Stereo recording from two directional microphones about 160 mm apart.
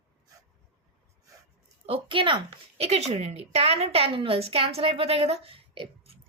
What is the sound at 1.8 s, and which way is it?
A woman's voice, 30° right (ahead or behind).